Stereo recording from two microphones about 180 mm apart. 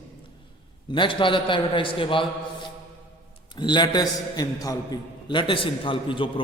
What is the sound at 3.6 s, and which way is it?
A man's voice, 25° left (ahead or behind).